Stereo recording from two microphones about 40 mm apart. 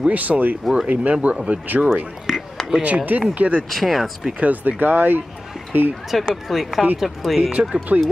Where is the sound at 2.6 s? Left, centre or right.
Centre.